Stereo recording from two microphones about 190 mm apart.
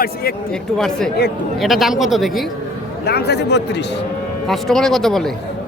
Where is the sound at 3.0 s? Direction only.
60° left (ahead or behind).